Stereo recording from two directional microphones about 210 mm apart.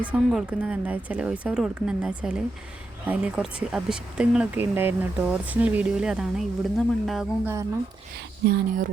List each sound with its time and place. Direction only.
0.1 s speech: 5° right (ahead or behind)
8.4 s speech: 40° right (ahead or behind)